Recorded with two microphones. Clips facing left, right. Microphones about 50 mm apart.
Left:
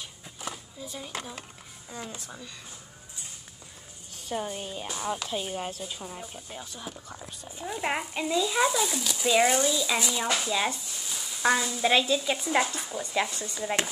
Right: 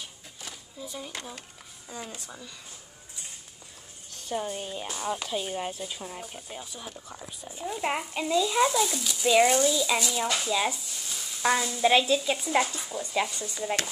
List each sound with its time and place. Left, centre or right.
0.9 s speech: centre
4.3 s speech: centre
6.8 s speech: centre
9.9 s speech: left
10.4 s speech: centre
12.3 s speech: centre